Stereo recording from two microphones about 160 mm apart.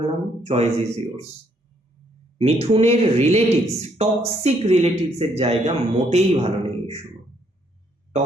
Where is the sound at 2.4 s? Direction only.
35° right (ahead or behind).